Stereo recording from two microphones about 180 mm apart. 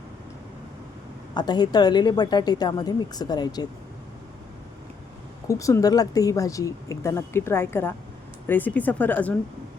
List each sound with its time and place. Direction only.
1.3 s a woman's voice: 25° left (ahead or behind)
5.5 s speech: 20° left (ahead or behind)